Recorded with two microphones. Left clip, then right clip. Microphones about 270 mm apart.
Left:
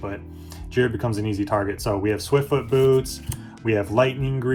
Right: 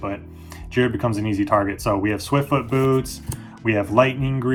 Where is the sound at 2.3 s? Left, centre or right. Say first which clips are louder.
Left 1 dB; right.